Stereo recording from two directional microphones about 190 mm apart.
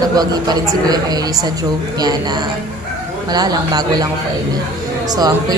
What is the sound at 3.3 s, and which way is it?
Speech, 20° right (ahead or behind).